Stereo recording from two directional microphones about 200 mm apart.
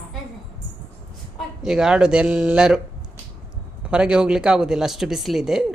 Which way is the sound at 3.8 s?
5° right (ahead or behind).